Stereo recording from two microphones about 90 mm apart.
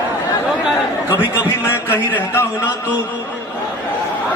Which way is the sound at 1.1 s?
20° right (ahead or behind).